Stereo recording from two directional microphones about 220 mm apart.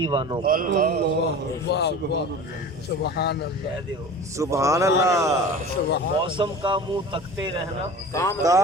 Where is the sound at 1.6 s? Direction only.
50° left (ahead or behind).